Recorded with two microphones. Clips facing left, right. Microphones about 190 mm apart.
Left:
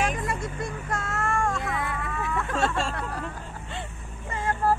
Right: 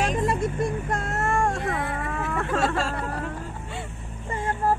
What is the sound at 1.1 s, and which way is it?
Child singing, 25° right (ahead or behind).